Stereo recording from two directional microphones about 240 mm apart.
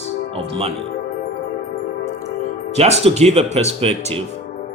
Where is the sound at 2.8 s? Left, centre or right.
Right.